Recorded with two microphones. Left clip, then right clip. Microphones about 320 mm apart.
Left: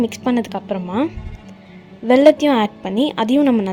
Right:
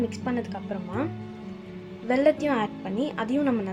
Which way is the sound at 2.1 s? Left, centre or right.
Left.